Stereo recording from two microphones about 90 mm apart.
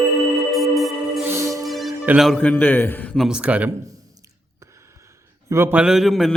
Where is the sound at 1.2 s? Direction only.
35° right (ahead or behind).